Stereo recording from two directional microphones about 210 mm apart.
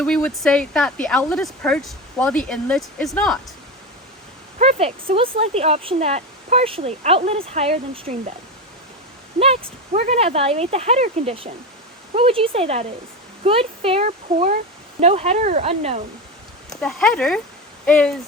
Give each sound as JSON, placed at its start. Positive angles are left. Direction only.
{"t": 0.0, "sound": "speech", "side_deg": 5}
{"t": 4.6, "sound": "speech", "side_deg": -30}
{"t": 9.4, "sound": "speech", "side_deg": -30}
{"t": 16.6, "sound": "speech", "side_deg": 0}